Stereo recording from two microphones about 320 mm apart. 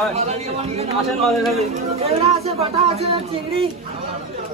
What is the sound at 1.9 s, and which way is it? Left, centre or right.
Speech, centre.